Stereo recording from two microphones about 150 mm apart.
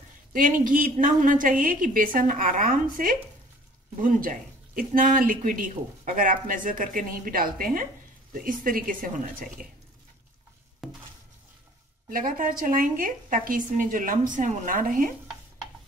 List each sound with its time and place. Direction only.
0.3 s speech: 60° right (ahead or behind)
10.8 s stir: centre (ahead or behind)
12.1 s speech: 70° right (ahead or behind)